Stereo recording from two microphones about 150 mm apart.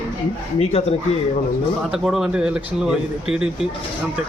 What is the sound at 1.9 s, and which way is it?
A man's voice, 5° right (ahead or behind).